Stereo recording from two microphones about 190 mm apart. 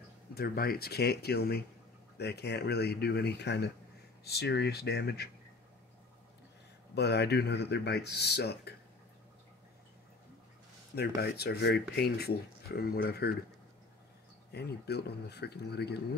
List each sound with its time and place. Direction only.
0.3 s speech: 55° left (ahead or behind)
7.0 s speech: 60° left (ahead or behind)
11.0 s speech: 60° left (ahead or behind)
14.5 s speech: 60° left (ahead or behind)